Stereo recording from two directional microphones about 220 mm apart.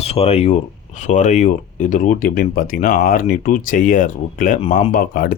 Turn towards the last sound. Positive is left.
turn(degrees=40)  # may be behind; listen again after turning